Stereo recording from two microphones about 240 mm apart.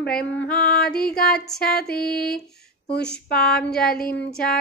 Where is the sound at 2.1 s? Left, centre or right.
Left.